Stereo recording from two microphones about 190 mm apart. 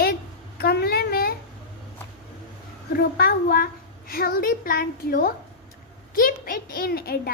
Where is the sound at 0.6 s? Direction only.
55° left (ahead or behind).